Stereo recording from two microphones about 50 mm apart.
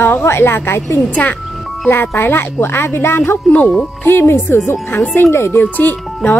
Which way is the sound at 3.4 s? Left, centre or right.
Left.